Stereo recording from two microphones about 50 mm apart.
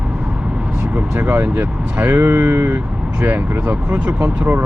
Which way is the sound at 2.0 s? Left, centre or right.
Right.